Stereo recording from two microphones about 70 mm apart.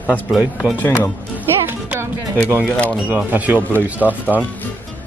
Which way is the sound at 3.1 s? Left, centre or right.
Right.